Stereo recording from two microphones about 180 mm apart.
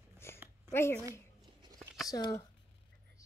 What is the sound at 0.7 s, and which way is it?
Speech, 15° left (ahead or behind).